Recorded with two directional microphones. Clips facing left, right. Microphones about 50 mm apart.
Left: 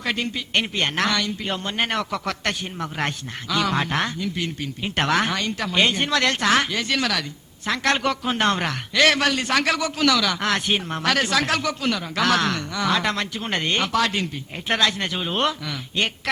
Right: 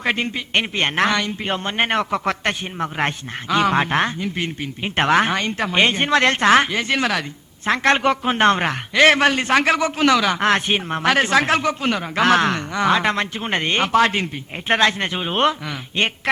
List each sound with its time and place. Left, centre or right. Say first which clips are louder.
0.0 s a man's voice: right 4 dB; right